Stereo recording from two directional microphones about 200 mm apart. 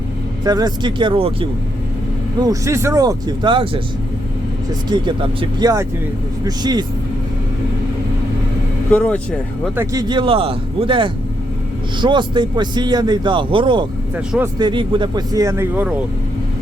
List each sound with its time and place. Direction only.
0.4 s speech: 20° right (ahead or behind)
2.4 s speech: 15° right (ahead or behind)
4.9 s speech: 20° right (ahead or behind)
8.9 s speech: 10° left (ahead or behind)
9.7 s speech: 20° right (ahead or behind)